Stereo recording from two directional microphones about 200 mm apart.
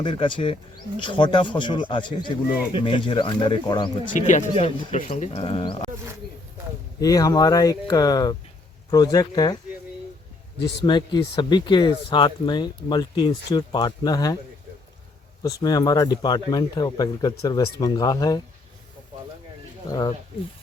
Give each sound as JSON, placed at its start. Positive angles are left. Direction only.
{"t": 0.0, "sound": "speech", "side_deg": 25}
{"t": 4.1, "sound": "speech", "side_deg": 40}
{"t": 7.0, "sound": "speech", "side_deg": 20}
{"t": 10.8, "sound": "speech", "side_deg": 20}
{"t": 15.6, "sound": "speech", "side_deg": 20}
{"t": 19.9, "sound": "speech", "side_deg": 20}